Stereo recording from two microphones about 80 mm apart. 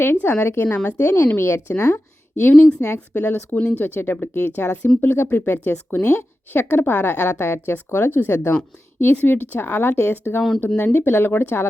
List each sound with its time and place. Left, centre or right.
0.0 s a woman's voice: left
3.1 s a woman's voice: centre